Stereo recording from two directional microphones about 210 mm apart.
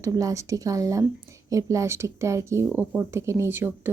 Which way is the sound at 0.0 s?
15° right (ahead or behind).